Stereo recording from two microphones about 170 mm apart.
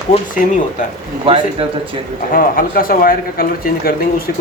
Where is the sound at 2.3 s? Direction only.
55° left (ahead or behind).